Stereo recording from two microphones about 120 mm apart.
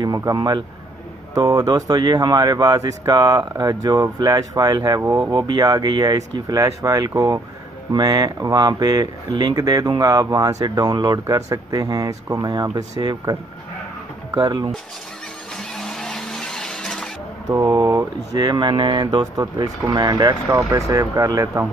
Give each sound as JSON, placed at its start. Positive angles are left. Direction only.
{"t": 0.0, "sound": "speech", "side_deg": -30}
{"t": 15.5, "sound": "vehicle", "side_deg": 5}
{"t": 17.6, "sound": "speech", "side_deg": -30}